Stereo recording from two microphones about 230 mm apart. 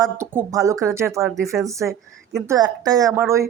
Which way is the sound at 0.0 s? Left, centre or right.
Centre.